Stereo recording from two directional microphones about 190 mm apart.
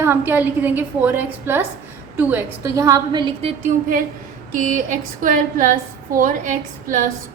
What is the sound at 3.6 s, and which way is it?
A woman's voice, 45° right (ahead or behind).